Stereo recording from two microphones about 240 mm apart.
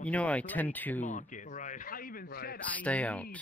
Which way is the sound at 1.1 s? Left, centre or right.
Left.